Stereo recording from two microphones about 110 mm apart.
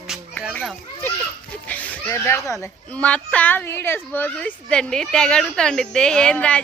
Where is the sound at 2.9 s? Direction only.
10° left (ahead or behind).